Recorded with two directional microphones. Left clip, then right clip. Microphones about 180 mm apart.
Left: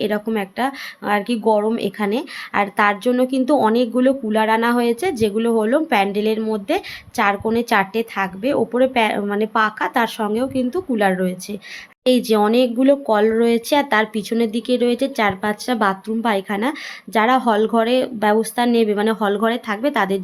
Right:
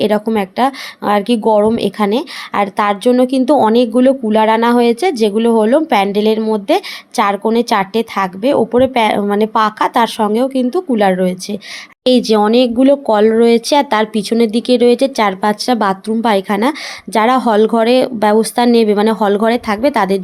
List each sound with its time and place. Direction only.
0.0 s speech: 25° right (ahead or behind)